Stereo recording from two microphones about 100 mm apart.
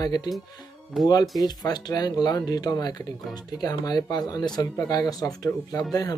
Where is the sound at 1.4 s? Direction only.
45° left (ahead or behind).